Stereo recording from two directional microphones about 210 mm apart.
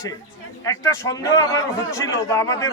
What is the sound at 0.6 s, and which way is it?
A man's voice, 15° left (ahead or behind).